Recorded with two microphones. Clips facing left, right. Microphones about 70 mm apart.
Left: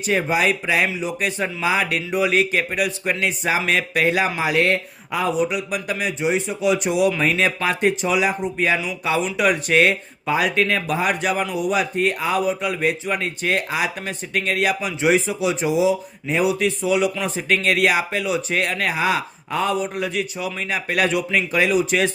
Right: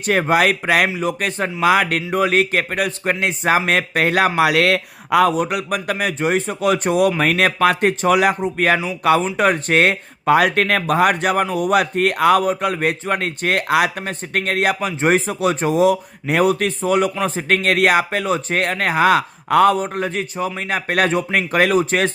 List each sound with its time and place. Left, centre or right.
0.0 s speech: right
0.9 s speech: right
5.3 s speech: right
9.2 s speech: right
14.0 s speech: right